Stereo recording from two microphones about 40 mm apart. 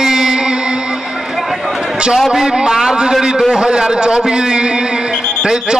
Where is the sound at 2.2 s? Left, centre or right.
Centre.